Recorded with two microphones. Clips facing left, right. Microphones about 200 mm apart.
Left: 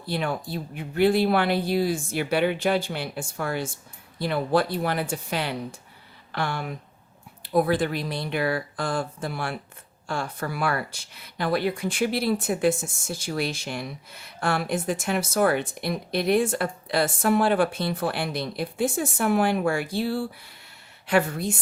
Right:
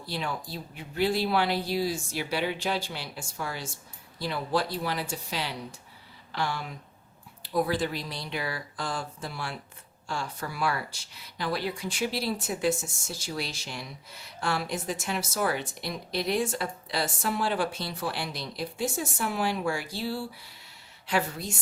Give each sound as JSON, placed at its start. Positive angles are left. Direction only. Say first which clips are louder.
{"t": 0.0, "sound": "speech", "louder": "left 6 dB", "side_deg": 55}